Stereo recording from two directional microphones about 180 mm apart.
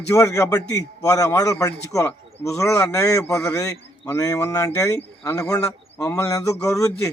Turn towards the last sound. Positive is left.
turn(degrees=15)  # may be behind; listen again after turning